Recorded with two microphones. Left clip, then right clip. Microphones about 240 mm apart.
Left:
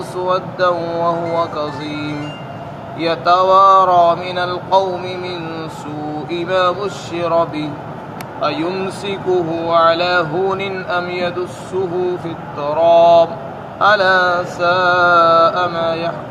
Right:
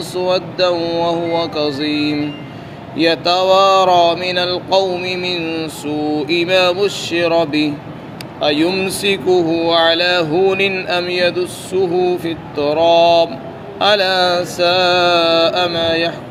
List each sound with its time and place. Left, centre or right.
0.2 s speech: right
12.5 s speech: right